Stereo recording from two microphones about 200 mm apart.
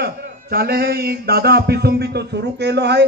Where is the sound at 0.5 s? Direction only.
50° right (ahead or behind).